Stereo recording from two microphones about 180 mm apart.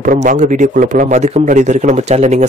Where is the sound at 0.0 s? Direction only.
45° right (ahead or behind).